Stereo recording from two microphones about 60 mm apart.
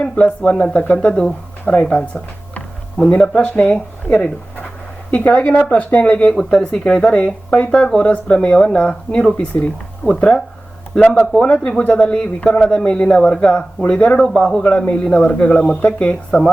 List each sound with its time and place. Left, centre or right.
0.0 s speech: centre